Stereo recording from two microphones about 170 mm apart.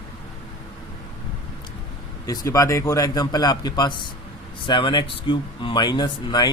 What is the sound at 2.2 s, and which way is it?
Speech, 20° left (ahead or behind).